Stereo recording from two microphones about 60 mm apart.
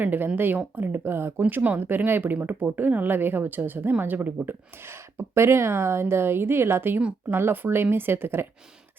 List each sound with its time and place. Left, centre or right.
0.0 s speech: right
1.4 s speech: right